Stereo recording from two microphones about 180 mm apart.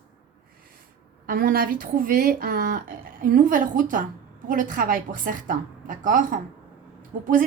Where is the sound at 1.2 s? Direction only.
55° right (ahead or behind).